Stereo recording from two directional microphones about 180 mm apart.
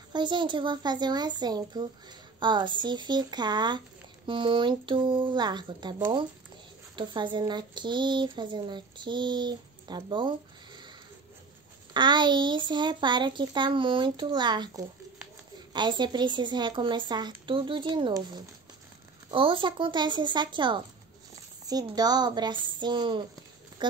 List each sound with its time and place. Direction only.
0.1 s speech: 25° right (ahead or behind)
11.9 s speech: 25° right (ahead or behind)